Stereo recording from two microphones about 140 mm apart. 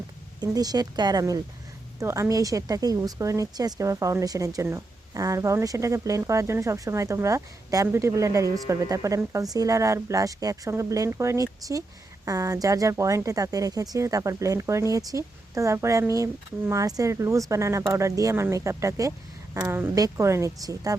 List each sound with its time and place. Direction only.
0.3 s speech: 25° right (ahead or behind)